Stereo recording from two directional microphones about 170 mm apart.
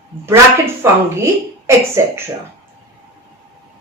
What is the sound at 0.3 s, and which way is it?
A woman's voice, 15° right (ahead or behind).